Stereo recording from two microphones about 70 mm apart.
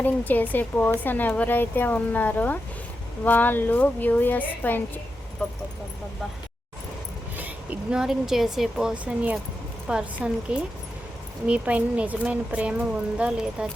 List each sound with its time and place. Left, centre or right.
0.0 s speech: left
5.4 s speech: centre
7.3 s a sound: right
7.9 s a woman's voice: centre
8.9 s speech: centre